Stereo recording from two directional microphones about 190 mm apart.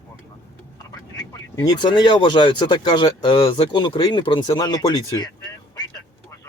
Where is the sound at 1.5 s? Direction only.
20° left (ahead or behind).